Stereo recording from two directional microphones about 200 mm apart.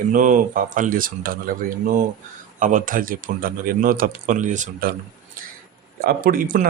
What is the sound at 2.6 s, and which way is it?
A man's voice, 40° right (ahead or behind).